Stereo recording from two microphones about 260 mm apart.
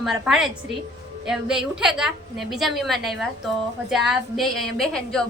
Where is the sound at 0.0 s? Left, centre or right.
Centre.